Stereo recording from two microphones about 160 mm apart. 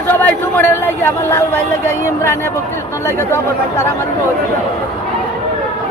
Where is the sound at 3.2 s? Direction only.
15° left (ahead or behind).